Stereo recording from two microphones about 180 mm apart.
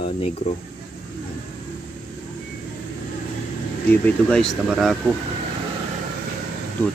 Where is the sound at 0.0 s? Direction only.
35° left (ahead or behind).